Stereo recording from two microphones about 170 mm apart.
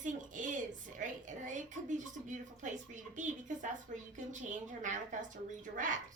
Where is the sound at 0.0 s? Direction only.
50° right (ahead or behind).